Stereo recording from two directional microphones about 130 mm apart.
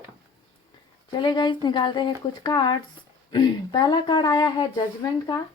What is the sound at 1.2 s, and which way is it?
Speech, 35° left (ahead or behind).